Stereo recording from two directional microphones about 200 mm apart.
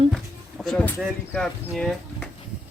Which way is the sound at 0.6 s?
5° left (ahead or behind).